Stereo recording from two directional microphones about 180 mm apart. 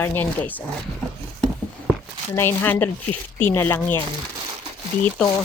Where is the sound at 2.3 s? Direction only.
15° left (ahead or behind).